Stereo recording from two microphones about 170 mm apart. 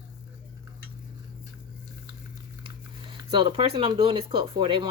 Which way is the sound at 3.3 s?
30° right (ahead or behind).